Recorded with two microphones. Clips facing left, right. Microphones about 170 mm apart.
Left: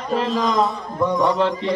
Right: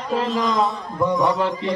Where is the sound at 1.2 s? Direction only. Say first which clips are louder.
Left 2 dB; 10° right (ahead or behind).